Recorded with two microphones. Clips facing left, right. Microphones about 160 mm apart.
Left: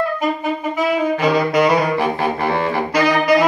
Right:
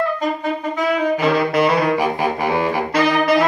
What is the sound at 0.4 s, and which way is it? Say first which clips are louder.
Clarinet: left 1 dB; 10° left (ahead or behind).